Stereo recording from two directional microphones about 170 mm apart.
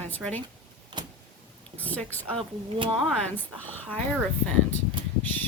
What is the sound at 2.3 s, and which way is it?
Speech, 30° right (ahead or behind).